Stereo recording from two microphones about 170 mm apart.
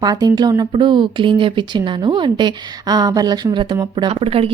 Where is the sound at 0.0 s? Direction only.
25° right (ahead or behind).